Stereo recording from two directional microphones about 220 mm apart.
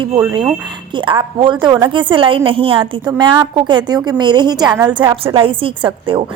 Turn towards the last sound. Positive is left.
turn(degrees=-25)  # may be behind; listen again after turning